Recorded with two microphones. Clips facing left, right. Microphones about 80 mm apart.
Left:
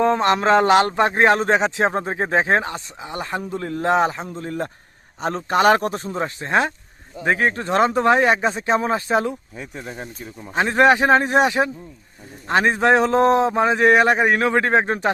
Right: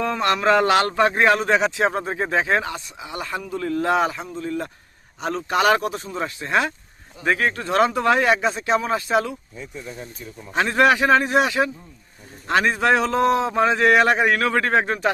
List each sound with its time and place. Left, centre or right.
0.0 s a man's voice: left
9.6 s speech: left
10.6 s a man's voice: left